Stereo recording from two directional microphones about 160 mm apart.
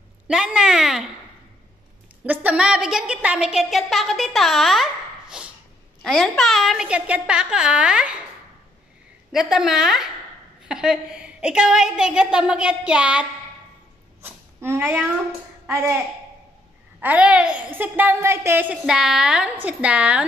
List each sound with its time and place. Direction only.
0.3 s a woman's voice: 5° right (ahead or behind)
2.2 s a woman's voice: 10° right (ahead or behind)
5.4 s a sound: 5° right (ahead or behind)
6.0 s a woman's voice: 5° left (ahead or behind)
9.3 s a woman's voice: 5° right (ahead or behind)
17.0 s speech: 10° right (ahead or behind)